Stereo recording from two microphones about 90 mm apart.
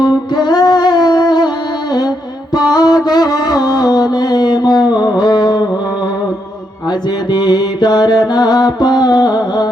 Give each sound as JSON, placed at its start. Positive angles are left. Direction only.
{"t": 0.0, "sound": "music", "side_deg": 50}
{"t": 7.3, "sound": "mantra", "side_deg": 50}